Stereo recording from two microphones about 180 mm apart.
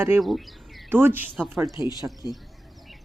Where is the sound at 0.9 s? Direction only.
10° right (ahead or behind).